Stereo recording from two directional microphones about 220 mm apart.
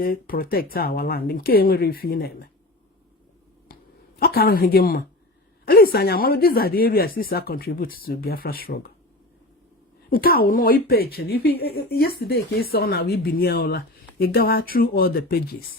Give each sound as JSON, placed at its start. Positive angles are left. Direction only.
{"t": 0.0, "sound": "a woman's voice", "side_deg": 40}
{"t": 3.7, "sound": "a sound", "side_deg": 45}
{"t": 4.2, "sound": "a woman's voice", "side_deg": 45}
{"t": 10.1, "sound": "a woman's voice", "side_deg": 45}